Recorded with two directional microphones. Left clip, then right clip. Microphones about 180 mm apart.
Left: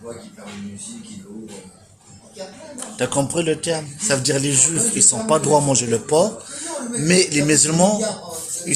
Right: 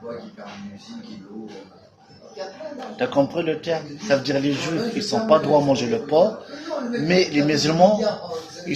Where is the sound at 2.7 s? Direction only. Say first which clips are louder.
Right 1 dB; 50° left (ahead or behind).